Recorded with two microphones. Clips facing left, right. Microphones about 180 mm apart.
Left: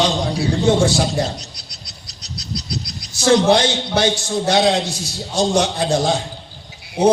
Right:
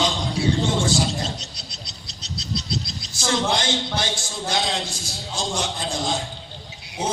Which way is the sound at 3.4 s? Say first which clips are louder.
Left 8 dB; 70° left (ahead or behind).